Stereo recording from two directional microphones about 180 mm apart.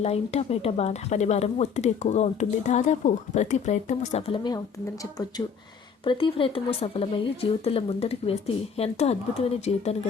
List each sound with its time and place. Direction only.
0.0 s speech: 35° left (ahead or behind)
6.1 s speech: 30° left (ahead or behind)